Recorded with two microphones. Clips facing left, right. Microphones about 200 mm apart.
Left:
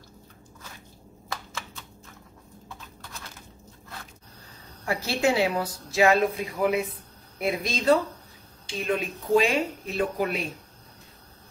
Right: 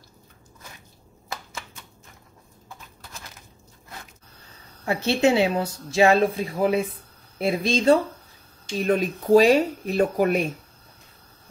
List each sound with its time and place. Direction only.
4.8 s a woman's voice: 25° right (ahead or behind)
8.6 s speech: 40° right (ahead or behind)